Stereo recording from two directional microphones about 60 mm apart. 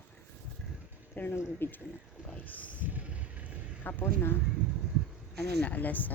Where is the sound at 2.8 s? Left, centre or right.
Right.